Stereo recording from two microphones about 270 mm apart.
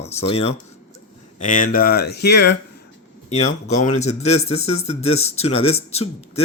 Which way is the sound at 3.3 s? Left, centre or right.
Left.